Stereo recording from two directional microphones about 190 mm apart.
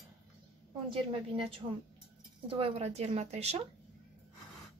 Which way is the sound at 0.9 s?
30° right (ahead or behind).